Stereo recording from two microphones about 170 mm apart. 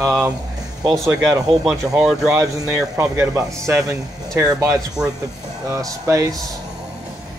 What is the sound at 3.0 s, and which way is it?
Speech, 20° right (ahead or behind).